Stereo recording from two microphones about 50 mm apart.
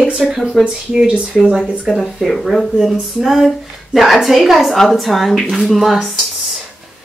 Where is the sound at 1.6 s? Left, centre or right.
Right.